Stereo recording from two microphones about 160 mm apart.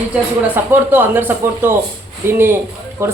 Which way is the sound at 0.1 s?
10° right (ahead or behind).